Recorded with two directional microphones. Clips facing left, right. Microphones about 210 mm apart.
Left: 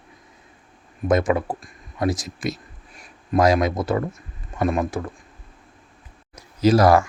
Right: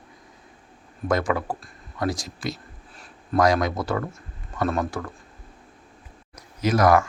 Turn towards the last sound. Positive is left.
turn(degrees=30)  # may be behind; listen again after turning